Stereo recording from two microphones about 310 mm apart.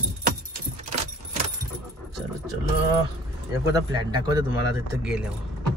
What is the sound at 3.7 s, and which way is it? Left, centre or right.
Speech, centre.